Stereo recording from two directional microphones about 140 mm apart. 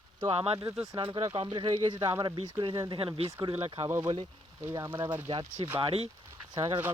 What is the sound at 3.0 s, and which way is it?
Speech, 40° right (ahead or behind).